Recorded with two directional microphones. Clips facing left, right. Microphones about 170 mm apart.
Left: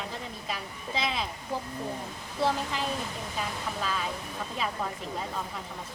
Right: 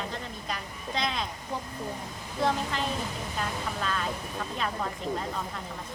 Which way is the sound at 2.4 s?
5° left (ahead or behind).